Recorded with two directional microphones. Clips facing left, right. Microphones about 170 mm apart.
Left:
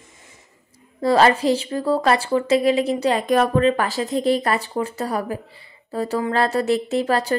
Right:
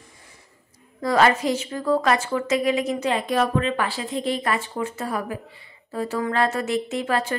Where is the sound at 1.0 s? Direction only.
30° left (ahead or behind).